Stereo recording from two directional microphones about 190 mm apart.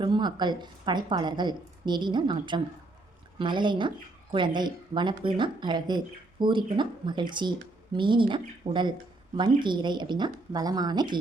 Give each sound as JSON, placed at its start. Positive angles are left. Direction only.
{"t": 0.0, "sound": "speech", "side_deg": -25}